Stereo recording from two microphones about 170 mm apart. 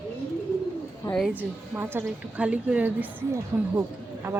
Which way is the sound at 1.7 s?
10° right (ahead or behind).